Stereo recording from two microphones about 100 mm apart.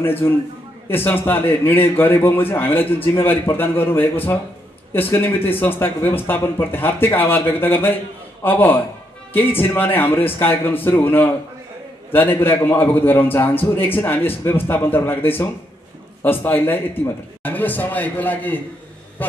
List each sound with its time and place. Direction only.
0.0 s a man's voice: 20° left (ahead or behind)